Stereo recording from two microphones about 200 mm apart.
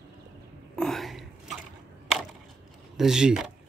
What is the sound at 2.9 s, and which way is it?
Speech, centre (ahead or behind).